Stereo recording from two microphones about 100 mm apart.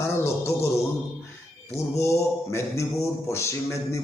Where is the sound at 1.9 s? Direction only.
30° left (ahead or behind).